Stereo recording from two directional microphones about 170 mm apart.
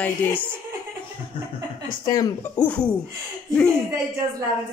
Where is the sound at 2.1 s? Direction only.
20° left (ahead or behind).